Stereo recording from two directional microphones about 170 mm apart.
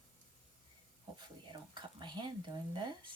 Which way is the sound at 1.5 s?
25° right (ahead or behind).